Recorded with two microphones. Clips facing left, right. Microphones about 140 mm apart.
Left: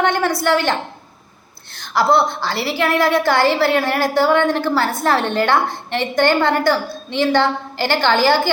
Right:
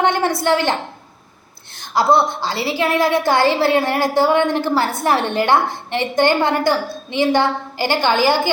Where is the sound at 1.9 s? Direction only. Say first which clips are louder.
Even; 20° right (ahead or behind).